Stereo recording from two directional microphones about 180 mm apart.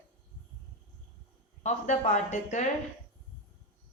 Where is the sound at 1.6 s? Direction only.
40° left (ahead or behind).